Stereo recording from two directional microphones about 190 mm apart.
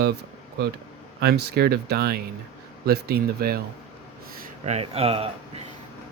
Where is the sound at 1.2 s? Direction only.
55° right (ahead or behind).